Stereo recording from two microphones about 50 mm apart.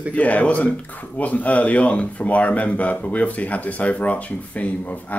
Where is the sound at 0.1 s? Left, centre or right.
Left.